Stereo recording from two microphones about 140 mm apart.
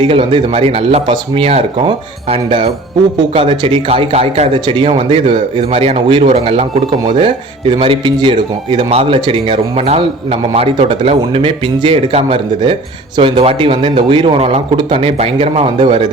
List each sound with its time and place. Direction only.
0.0 s speech: 35° right (ahead or behind)
4.5 s speech: 35° right (ahead or behind)